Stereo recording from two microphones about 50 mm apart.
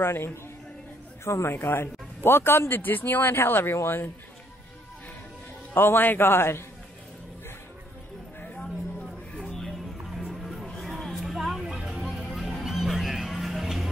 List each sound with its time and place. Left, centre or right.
0.0 s speech: left
1.2 s a man's voice: left
1.5 s speech: left
5.8 s speech: left
9.5 s music: centre